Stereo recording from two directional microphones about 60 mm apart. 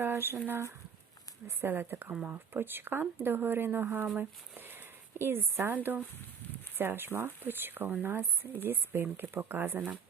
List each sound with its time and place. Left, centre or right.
0.0 s speech: right
1.5 s speech: right